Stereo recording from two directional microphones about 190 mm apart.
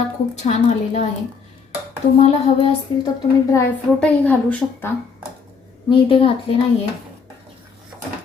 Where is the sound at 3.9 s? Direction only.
5° left (ahead or behind).